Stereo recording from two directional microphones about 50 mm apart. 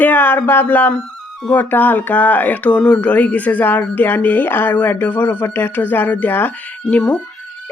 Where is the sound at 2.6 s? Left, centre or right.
Left.